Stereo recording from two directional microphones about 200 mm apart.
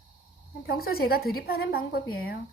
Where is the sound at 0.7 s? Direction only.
50° left (ahead or behind).